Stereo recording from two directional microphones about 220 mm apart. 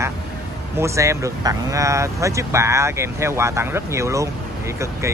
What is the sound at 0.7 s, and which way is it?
Speech, 15° right (ahead or behind).